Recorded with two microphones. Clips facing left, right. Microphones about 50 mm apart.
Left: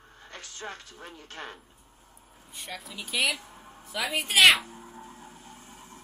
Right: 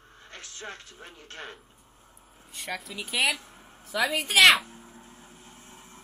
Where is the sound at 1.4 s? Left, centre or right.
Centre.